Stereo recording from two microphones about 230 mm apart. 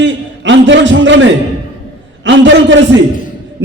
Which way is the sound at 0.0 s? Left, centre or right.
Right.